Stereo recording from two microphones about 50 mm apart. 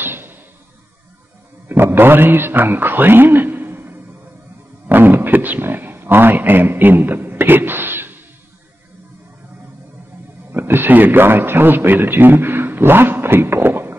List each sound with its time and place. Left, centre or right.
0.0 s arrow: right
1.7 s a man's voice: right
10.5 s a man's voice: right